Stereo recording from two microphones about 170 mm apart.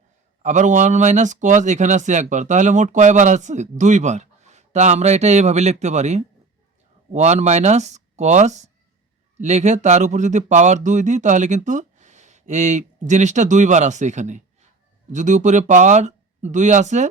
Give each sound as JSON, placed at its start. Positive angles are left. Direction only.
{"t": 0.4, "sound": "a man's voice", "side_deg": -45}